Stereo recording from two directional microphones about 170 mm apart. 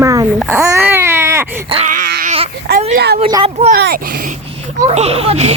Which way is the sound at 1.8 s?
50° right (ahead or behind).